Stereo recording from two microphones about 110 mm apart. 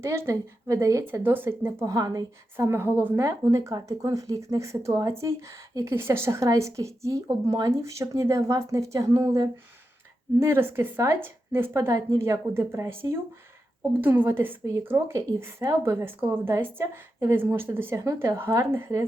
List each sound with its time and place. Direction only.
0.0 s a woman's voice: 25° right (ahead or behind)
1.8 s speech: 35° right (ahead or behind)
2.6 s a woman's voice: 20° right (ahead or behind)
10.4 s a woman's voice: 20° right (ahead or behind)